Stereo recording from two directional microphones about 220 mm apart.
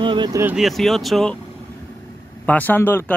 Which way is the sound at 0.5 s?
Centre (ahead or behind).